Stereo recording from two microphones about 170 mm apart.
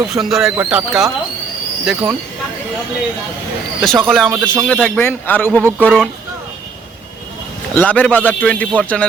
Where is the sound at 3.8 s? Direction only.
5° left (ahead or behind).